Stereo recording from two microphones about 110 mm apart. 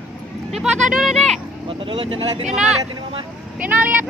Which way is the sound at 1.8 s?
55° right (ahead or behind).